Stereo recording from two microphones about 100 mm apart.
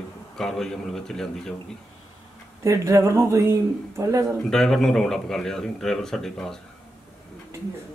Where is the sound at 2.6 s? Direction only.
30° right (ahead or behind).